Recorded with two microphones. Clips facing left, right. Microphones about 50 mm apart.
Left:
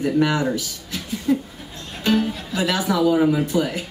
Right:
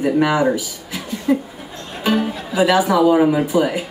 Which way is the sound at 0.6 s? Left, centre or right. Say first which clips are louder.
Right 3 dB; centre.